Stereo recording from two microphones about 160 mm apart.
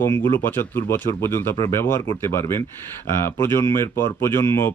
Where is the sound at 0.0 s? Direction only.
15° left (ahead or behind).